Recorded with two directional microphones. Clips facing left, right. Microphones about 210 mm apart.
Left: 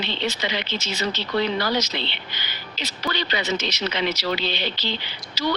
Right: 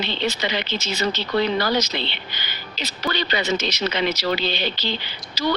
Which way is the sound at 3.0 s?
45° right (ahead or behind).